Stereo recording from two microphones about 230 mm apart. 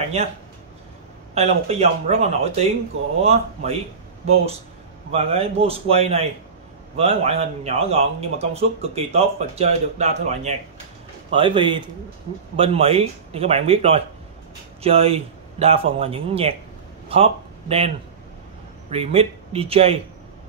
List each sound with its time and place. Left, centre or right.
0.2 s speech: right
5.1 s speech: right